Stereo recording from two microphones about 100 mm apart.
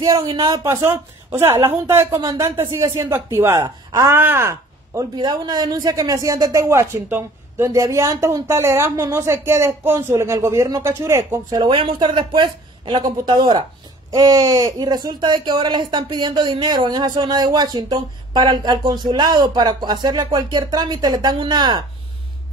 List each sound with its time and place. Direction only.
0.0 s speech: 40° right (ahead or behind)
0.7 s speech: 25° right (ahead or behind)
5.1 s speech: 45° right (ahead or behind); by 11.2 s 30° right (ahead or behind)
11.5 s speech: 55° right (ahead or behind)
14.1 s speech: 40° right (ahead or behind)